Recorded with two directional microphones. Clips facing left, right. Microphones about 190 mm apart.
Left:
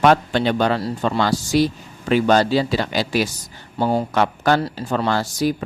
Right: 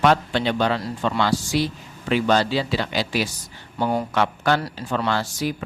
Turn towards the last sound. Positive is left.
turn(degrees=40)  # may be behind; listen again after turning